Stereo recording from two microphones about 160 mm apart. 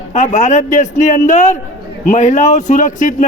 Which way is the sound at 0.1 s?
45° left (ahead or behind).